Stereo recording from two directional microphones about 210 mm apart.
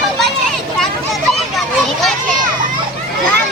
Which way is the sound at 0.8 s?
Centre (ahead or behind).